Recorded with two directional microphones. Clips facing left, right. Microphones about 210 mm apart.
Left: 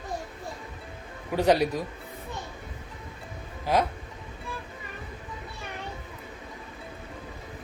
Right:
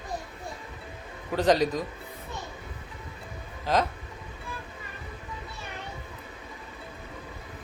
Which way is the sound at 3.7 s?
10° left (ahead or behind).